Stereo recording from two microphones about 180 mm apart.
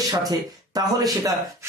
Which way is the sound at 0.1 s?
20° right (ahead or behind).